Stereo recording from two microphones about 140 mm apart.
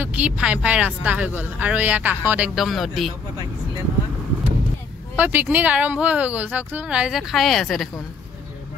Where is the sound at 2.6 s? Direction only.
Centre (ahead or behind).